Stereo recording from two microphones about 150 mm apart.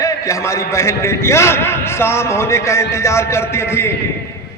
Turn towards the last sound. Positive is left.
turn(degrees=15)  # may be behind; listen again after turning